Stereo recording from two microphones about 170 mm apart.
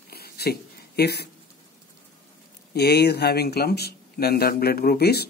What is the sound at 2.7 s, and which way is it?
Speech, 70° left (ahead or behind).